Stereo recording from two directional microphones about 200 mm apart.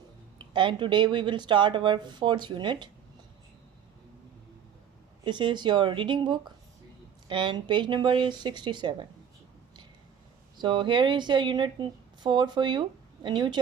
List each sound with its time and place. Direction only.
0.3 s speech: 25° right (ahead or behind)
5.2 s speech: 25° right (ahead or behind)
10.6 s speech: 25° right (ahead or behind)